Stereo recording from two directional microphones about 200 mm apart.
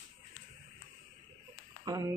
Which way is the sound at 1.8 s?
15° right (ahead or behind).